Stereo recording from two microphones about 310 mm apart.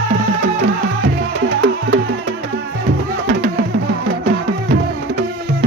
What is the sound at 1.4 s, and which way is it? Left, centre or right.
Music, right.